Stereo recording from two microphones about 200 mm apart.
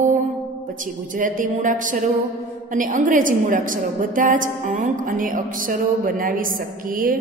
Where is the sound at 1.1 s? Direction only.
40° right (ahead or behind).